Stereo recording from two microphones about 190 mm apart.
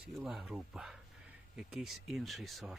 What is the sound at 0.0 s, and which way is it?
Speech, 5° right (ahead or behind).